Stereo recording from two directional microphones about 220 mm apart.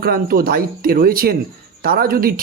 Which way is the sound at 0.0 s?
40° right (ahead or behind).